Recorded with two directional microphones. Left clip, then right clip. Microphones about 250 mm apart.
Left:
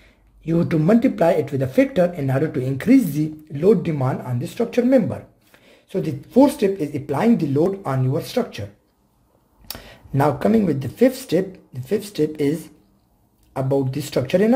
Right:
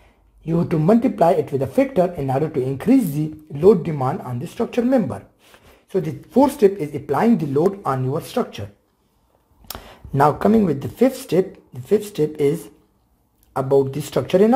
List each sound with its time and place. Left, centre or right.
0.5 s speech: centre
7.5 s speech: centre
8.2 s speech: centre
9.7 s speech: centre
13.5 s a sound: centre
13.8 s speech: centre